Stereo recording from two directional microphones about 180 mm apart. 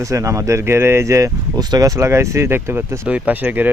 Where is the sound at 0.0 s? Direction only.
15° right (ahead or behind).